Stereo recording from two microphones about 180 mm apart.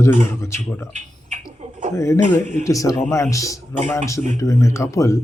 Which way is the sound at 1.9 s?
15° left (ahead or behind).